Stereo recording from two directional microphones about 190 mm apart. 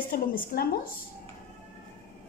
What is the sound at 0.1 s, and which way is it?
Speech, 50° left (ahead or behind).